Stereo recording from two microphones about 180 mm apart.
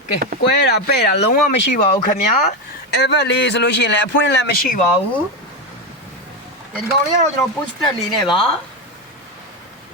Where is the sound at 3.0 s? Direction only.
75° left (ahead or behind); by 4.8 s 55° left (ahead or behind).